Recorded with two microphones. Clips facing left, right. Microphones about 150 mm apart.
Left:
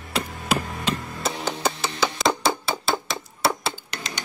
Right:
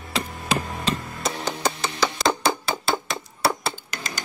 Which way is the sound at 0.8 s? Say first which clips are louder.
Even; centre (ahead or behind).